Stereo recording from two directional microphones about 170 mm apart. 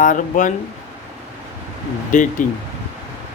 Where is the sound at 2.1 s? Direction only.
50° left (ahead or behind).